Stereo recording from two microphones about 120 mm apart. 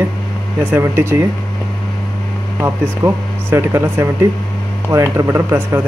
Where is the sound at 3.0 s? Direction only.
20° right (ahead or behind).